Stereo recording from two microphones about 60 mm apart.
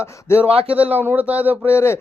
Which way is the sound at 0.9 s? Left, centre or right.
Left.